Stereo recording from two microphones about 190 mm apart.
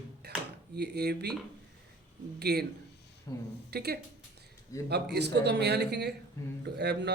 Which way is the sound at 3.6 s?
55° right (ahead or behind).